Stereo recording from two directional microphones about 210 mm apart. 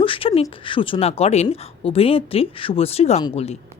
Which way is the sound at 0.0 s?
25° left (ahead or behind).